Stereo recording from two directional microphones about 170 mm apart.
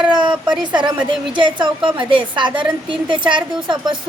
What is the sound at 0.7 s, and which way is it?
A woman's voice, 25° right (ahead or behind).